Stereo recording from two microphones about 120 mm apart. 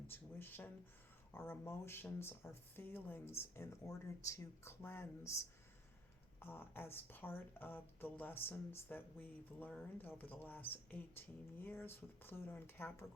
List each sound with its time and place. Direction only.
0.1 s a woman's voice: 15° left (ahead or behind)